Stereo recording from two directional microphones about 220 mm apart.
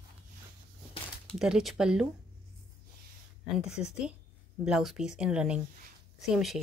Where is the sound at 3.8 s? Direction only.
5° right (ahead or behind).